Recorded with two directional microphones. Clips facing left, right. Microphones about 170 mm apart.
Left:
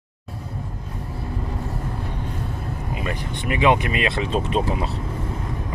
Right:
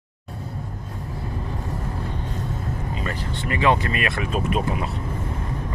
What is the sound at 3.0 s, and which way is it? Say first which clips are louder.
Speech: left 3 dB; 15° left (ahead or behind).